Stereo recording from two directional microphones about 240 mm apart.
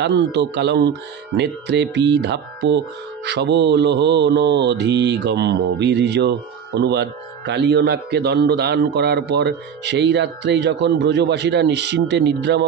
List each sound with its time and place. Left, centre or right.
0.0 s mantra: right